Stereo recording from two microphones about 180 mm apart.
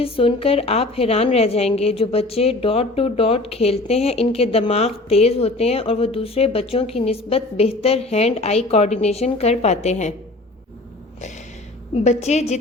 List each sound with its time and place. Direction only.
0.0 s a woman's voice: 30° left (ahead or behind)
12.0 s a woman's voice: 40° left (ahead or behind)